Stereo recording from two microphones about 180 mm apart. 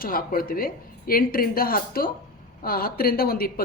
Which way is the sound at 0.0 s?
55° left (ahead or behind).